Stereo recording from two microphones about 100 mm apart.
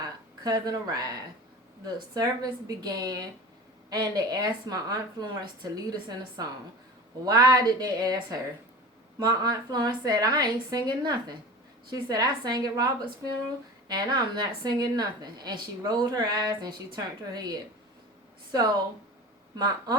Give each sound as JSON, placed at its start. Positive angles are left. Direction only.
{"t": 0.0, "sound": "a woman's voice", "side_deg": -40}
{"t": 19.5, "sound": "a woman's voice", "side_deg": -40}